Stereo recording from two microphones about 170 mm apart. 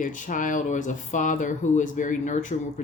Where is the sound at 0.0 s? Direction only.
50° left (ahead or behind).